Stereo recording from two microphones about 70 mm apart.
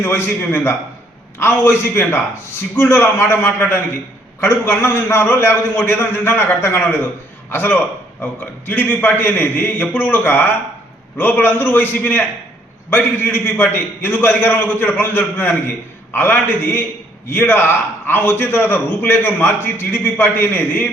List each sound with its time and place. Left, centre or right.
0.0 s a man's voice: left